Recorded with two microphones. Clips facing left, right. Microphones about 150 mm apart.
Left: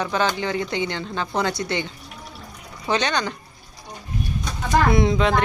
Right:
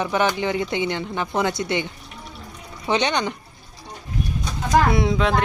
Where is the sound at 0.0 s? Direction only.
20° right (ahead or behind).